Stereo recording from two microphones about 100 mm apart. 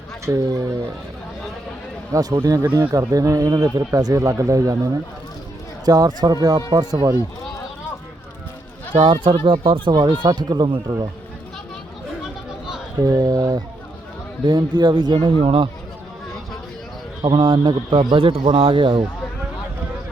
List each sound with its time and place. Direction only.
0.3 s speech: 35° right (ahead or behind)
2.1 s speech: 35° right (ahead or behind)
5.8 s a man's voice: 40° right (ahead or behind)
9.0 s speech: 55° right (ahead or behind)
10.1 s a man's voice: 45° right (ahead or behind)
12.5 s chatter: 5° right (ahead or behind)
13.0 s a man's voice: 40° right (ahead or behind); by 15.7 s 65° right (ahead or behind)
17.2 s a man's voice: 50° right (ahead or behind)
18.3 s speech: 65° right (ahead or behind)